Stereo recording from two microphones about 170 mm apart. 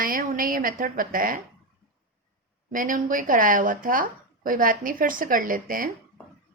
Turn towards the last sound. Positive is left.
turn(degrees=-55)  # may be behind; listen again after turning